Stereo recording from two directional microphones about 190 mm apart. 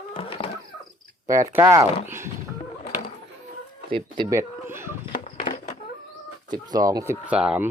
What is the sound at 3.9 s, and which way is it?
Speech, 25° right (ahead or behind).